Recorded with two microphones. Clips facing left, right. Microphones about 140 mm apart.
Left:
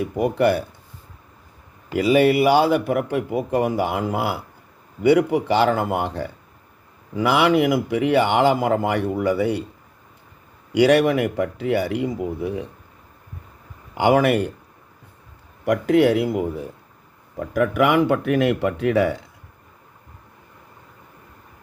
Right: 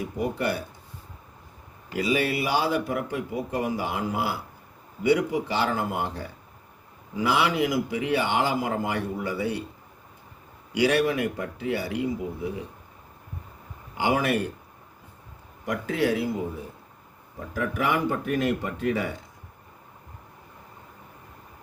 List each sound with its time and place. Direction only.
0.0 s speech: 60° left (ahead or behind)
1.9 s speech: 60° left (ahead or behind)
10.7 s speech: 60° left (ahead or behind)
13.9 s speech: 65° left (ahead or behind)
15.6 s speech: 65° left (ahead or behind)
17.5 s speech: 70° left (ahead or behind)